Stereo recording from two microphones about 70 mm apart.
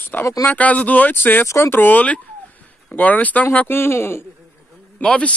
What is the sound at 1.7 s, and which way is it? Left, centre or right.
Speech, left.